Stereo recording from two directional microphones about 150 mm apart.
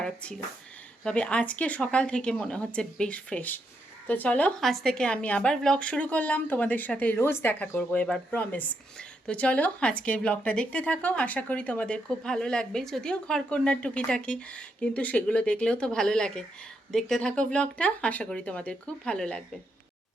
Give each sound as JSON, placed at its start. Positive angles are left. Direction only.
{"t": 0.0, "sound": "a woman's voice", "side_deg": 5}